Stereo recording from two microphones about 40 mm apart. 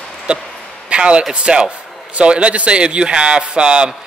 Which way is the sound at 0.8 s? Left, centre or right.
Right.